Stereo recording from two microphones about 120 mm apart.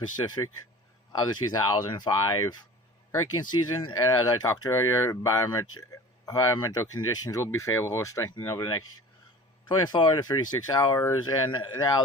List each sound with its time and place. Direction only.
0.2 s speech: 35° left (ahead or behind)